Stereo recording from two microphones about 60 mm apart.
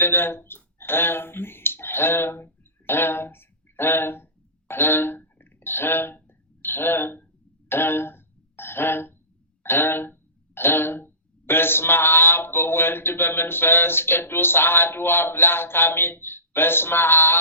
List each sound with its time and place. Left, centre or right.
0.0 s speech: left
7.7 s a sound: left
9.6 s speech: left